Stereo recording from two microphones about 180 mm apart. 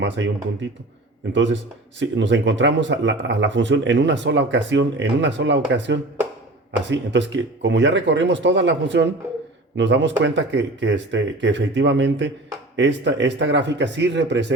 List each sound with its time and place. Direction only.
0.2 s speech: 90° right